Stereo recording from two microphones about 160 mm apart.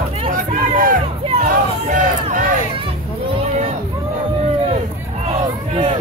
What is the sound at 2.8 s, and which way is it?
Children playing, 35° right (ahead or behind).